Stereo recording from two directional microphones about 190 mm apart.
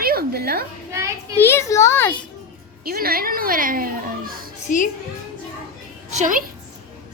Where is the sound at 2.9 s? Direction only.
50° right (ahead or behind).